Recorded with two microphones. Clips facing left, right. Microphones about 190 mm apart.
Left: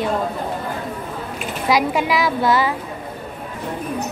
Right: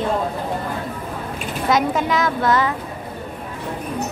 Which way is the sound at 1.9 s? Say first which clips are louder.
Left 1 dB; 15° left (ahead or behind).